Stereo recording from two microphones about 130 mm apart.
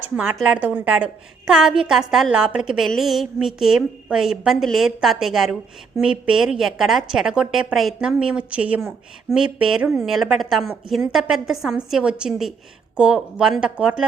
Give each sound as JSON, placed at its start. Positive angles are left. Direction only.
{"t": 0.3, "sound": "a woman's voice", "side_deg": -5}
{"t": 9.8, "sound": "a woman's voice", "side_deg": -20}
{"t": 10.1, "sound": "a woman's voice", "side_deg": 0}